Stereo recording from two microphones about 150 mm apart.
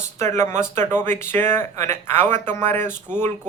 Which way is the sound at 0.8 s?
15° left (ahead or behind).